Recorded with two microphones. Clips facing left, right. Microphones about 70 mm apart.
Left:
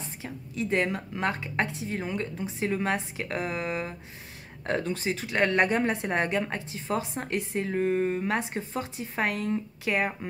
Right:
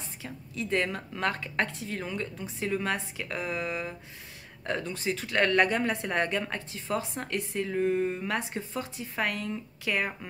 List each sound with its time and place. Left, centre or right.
0.2 s a woman's voice: left